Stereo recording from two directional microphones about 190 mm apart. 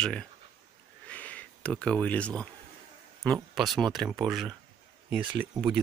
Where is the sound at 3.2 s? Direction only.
Centre (ahead or behind).